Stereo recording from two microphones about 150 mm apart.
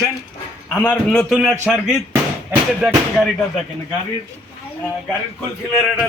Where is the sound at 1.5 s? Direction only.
5° right (ahead or behind).